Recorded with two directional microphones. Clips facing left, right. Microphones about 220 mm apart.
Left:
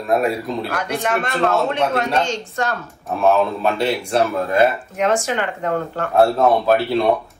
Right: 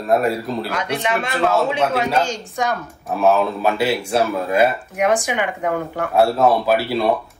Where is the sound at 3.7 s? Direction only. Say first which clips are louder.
Left 1 dB; 5° right (ahead or behind).